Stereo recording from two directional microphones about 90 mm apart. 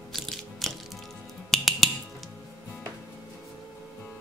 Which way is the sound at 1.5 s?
Centre (ahead or behind).